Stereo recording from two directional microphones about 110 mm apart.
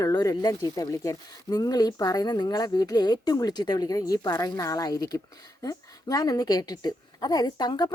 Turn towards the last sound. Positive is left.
turn(degrees=40)  # may be behind; listen again after turning